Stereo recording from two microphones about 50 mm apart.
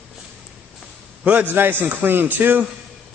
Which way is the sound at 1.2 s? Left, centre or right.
Right.